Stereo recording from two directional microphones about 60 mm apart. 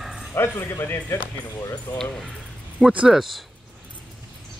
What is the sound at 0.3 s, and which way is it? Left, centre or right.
Speech, left.